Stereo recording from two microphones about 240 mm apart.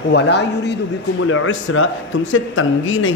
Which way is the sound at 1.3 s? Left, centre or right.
Left.